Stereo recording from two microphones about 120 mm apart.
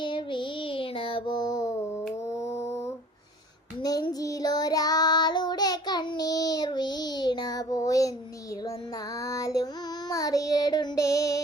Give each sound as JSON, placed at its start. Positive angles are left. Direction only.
{"t": 0.0, "sound": "child singing", "side_deg": 45}
{"t": 4.2, "sound": "child singing", "side_deg": 30}
{"t": 9.2, "sound": "child singing", "side_deg": 25}